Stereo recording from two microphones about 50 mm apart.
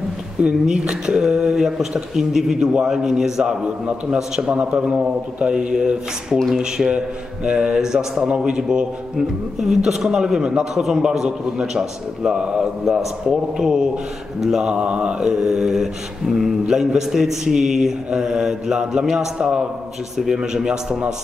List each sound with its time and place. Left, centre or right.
0.4 s a man's voice: centre
14.7 s a man's voice: right